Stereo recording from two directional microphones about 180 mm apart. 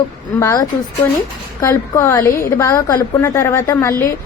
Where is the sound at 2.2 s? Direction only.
50° left (ahead or behind).